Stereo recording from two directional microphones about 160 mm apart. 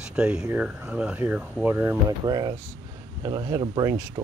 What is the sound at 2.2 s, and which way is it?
Speech, 25° right (ahead or behind).